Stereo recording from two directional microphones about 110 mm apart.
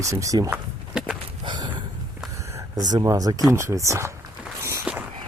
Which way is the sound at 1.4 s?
45° right (ahead or behind).